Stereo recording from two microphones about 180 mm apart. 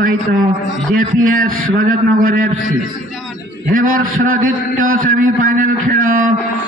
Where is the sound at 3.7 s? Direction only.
50° right (ahead or behind).